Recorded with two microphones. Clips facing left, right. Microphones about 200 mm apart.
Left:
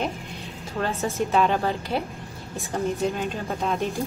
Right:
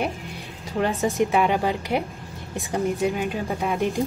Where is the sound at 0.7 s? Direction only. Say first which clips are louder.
Right 4 dB; 15° right (ahead or behind).